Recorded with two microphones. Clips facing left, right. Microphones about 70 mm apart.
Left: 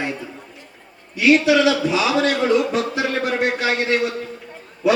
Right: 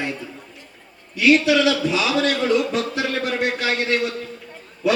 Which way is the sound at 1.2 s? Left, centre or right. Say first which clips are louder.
Left 1 dB; centre.